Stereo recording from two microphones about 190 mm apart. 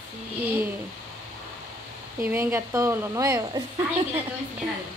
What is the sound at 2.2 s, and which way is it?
A woman's voice, 10° right (ahead or behind).